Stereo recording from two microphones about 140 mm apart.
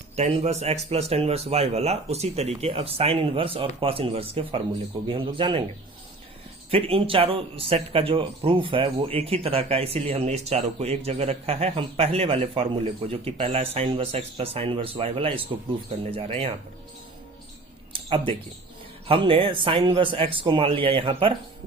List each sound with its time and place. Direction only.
0.2 s a man's voice: 50° right (ahead or behind)
6.7 s speech: 45° right (ahead or behind)
17.9 s a sound: 40° right (ahead or behind)
19.0 s a man's voice: 40° right (ahead or behind)